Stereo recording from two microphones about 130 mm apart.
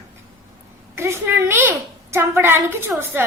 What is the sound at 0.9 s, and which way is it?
A woman's voice, 20° right (ahead or behind).